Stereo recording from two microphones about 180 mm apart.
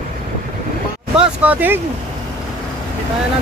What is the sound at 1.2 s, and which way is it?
Speech, 10° right (ahead or behind).